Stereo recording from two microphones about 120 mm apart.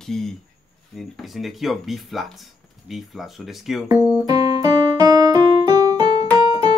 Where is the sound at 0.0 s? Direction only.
5° left (ahead or behind).